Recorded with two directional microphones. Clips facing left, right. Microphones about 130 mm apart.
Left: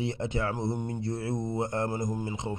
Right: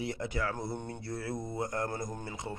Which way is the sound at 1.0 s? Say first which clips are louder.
Left 5 dB; 25° left (ahead or behind).